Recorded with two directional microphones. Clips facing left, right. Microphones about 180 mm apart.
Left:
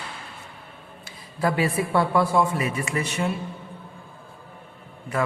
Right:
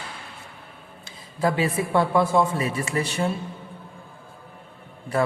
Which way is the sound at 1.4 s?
20° right (ahead or behind).